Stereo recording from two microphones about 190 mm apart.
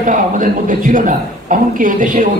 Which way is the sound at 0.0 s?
45° right (ahead or behind).